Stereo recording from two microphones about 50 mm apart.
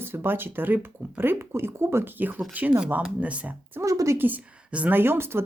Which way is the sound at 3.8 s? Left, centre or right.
Right.